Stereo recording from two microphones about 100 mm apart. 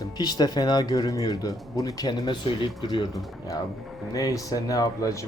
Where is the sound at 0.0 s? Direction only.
45° left (ahead or behind).